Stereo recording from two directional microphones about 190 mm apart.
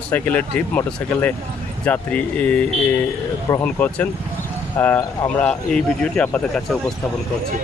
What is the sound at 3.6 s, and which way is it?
Speech, 10° left (ahead or behind).